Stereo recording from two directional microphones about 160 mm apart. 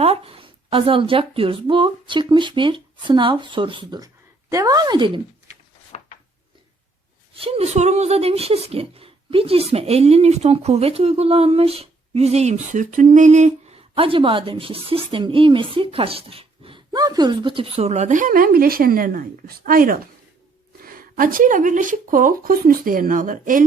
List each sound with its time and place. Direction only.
0.0 s speech: 35° right (ahead or behind)
5.9 s a sound: 45° left (ahead or behind)
7.3 s a woman's voice: 35° right (ahead or behind); by 23.6 s 60° right (ahead or behind)